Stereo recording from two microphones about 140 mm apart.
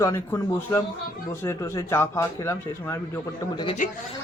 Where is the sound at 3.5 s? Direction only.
35° left (ahead or behind).